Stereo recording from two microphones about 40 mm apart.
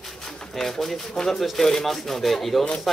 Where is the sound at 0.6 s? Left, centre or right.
Centre.